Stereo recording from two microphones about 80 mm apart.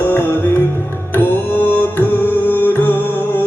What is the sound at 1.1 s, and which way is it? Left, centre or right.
Music, left.